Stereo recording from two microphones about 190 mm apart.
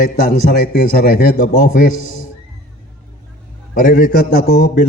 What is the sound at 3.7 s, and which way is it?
A man's voice, 45° left (ahead or behind).